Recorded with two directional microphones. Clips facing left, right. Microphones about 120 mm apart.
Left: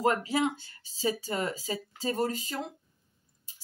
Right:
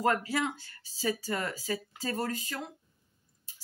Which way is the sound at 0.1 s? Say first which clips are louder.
Left 2 dB; 20° left (ahead or behind).